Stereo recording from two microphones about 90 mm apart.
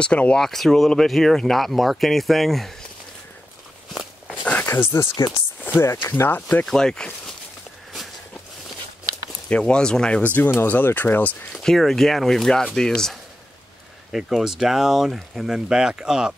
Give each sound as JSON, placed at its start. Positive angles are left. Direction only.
{"t": 0.0, "sound": "speech", "side_deg": 10}
{"t": 3.9, "sound": "walk", "side_deg": -5}
{"t": 4.6, "sound": "speech", "side_deg": 30}
{"t": 5.6, "sound": "a sound", "side_deg": 20}
{"t": 5.9, "sound": "speech", "side_deg": 30}
{"t": 6.6, "sound": "speech", "side_deg": 5}
{"t": 9.5, "sound": "speech", "side_deg": 10}
{"t": 11.5, "sound": "speech", "side_deg": 0}